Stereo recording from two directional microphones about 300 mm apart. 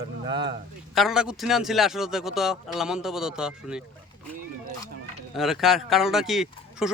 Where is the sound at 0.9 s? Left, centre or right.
Centre.